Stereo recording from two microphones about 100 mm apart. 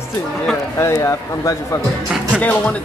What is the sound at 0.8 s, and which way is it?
Speech, 30° left (ahead or behind).